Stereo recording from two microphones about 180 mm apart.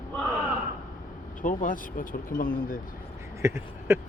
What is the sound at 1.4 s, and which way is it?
Speech, 45° left (ahead or behind).